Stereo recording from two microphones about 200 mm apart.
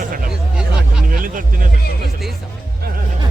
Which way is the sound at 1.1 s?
45° right (ahead or behind).